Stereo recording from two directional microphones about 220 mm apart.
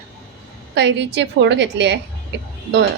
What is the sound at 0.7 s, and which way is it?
Speech, 55° right (ahead or behind).